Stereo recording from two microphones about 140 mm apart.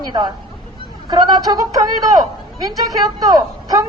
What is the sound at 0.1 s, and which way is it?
A man's voice, 30° right (ahead or behind).